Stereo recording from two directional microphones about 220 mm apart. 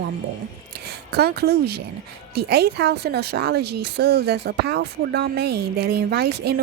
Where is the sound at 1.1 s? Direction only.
45° right (ahead or behind).